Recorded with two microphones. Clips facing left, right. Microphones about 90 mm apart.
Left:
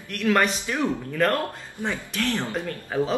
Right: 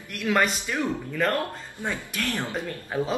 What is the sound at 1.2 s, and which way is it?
Speech, centre (ahead or behind).